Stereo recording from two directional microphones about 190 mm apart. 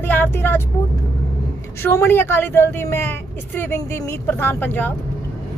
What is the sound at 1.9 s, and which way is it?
Speech, 10° left (ahead or behind).